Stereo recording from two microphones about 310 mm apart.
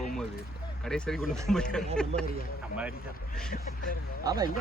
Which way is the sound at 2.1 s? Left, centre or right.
Centre.